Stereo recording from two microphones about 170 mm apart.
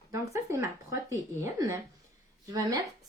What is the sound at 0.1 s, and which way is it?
Speech, 20° right (ahead or behind).